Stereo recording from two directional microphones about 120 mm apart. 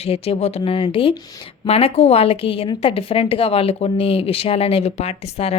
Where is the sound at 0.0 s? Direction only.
55° left (ahead or behind).